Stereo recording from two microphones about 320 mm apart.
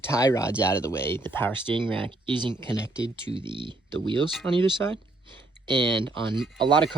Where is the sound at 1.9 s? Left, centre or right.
Centre.